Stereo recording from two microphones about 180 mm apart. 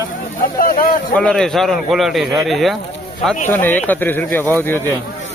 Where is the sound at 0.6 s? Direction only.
55° left (ahead or behind).